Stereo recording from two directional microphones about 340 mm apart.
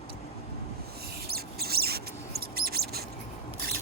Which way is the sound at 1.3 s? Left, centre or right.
Right.